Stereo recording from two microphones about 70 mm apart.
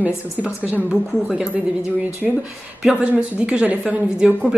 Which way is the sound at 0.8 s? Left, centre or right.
Centre.